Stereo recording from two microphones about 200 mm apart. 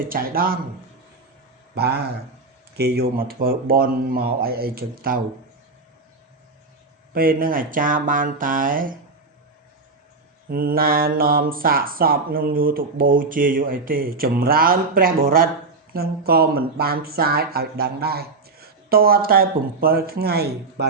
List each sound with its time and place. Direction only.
0.0 s speech: 45° right (ahead or behind)
1.7 s speech: 55° right (ahead or behind)
7.1 s speech: 45° right (ahead or behind)
10.5 s speech: 45° right (ahead or behind)